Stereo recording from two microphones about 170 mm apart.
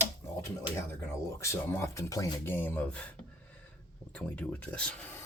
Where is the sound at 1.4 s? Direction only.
15° left (ahead or behind).